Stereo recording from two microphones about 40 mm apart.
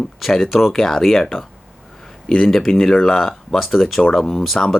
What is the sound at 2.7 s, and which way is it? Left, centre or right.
Speech, centre.